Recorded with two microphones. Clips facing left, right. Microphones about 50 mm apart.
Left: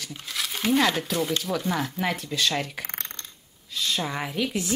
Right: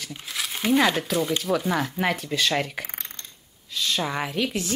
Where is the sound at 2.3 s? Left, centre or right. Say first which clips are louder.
Right 2 dB; right.